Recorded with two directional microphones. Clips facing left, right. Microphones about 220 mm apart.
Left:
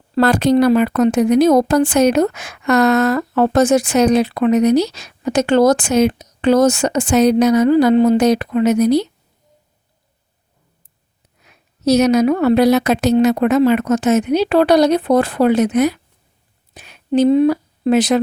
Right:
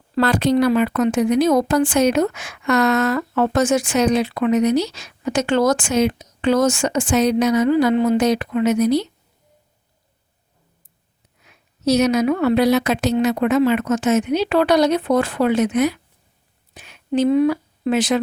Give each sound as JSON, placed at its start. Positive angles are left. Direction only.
{"t": 0.2, "sound": "a woman's voice", "side_deg": 45}
{"t": 11.4, "sound": "a woman's voice", "side_deg": 40}